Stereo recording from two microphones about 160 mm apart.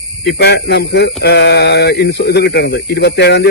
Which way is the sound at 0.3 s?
90° left.